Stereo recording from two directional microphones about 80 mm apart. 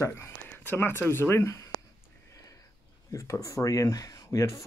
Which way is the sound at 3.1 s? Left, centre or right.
Left.